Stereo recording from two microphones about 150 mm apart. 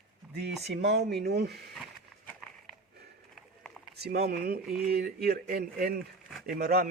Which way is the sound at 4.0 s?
90° right.